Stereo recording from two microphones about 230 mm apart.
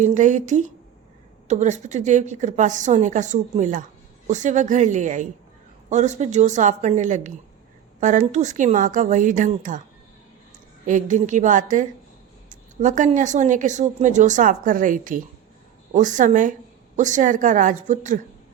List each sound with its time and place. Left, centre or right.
0.0 s a woman's voice: right
10.8 s a woman's voice: right